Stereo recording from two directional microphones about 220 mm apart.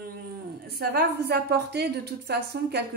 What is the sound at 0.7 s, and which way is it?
A woman's voice, 45° right (ahead or behind).